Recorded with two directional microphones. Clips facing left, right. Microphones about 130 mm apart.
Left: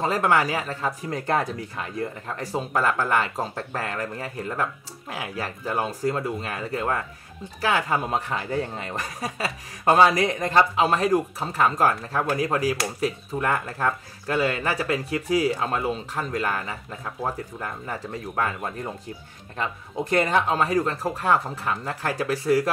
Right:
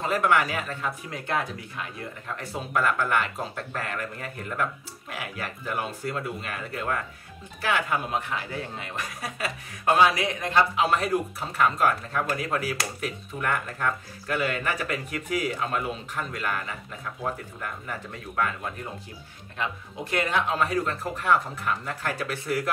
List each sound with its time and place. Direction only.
0.0 s speech: 35° left (ahead or behind)
19.5 s speech: 40° left (ahead or behind)